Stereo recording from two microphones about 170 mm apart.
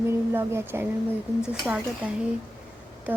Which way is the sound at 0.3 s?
15° right (ahead or behind).